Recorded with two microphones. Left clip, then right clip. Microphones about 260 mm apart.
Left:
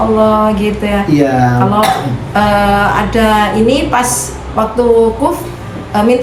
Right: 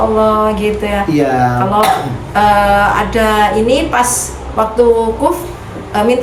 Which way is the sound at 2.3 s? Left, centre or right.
Centre.